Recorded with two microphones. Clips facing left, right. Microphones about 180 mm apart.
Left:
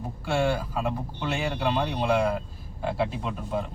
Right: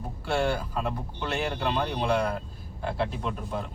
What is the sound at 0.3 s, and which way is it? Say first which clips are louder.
Speech: left 1 dB; 5° left (ahead or behind).